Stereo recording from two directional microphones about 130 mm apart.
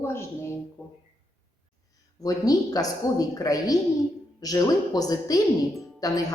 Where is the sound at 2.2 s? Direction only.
30° left (ahead or behind).